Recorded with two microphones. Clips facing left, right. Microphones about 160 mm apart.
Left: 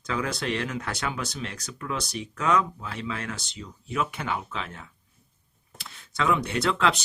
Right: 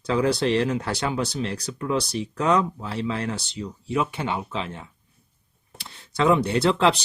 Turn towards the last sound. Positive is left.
turn(degrees=-30)  # may be behind; listen again after turning